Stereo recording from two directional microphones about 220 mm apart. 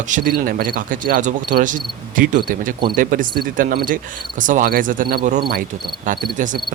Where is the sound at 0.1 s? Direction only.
40° right (ahead or behind).